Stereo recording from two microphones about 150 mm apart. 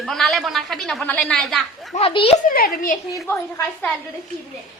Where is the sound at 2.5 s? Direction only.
75° left (ahead or behind).